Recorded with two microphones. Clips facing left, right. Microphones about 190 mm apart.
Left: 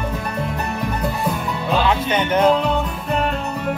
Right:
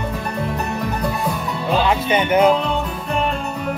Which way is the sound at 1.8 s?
10° right (ahead or behind).